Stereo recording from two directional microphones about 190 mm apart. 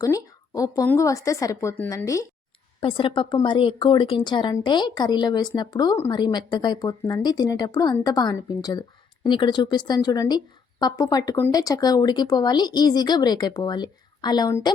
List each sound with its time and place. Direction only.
0.0 s speech: 15° left (ahead or behind)
2.8 s speech: 25° left (ahead or behind)